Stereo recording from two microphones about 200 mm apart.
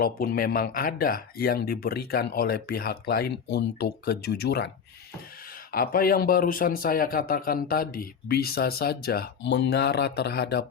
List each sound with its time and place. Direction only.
0.0 s speech: 50° left (ahead or behind)
5.7 s speech: 45° left (ahead or behind)